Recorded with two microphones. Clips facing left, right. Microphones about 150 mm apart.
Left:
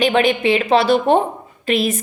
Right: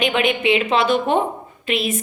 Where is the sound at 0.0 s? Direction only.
35° left (ahead or behind).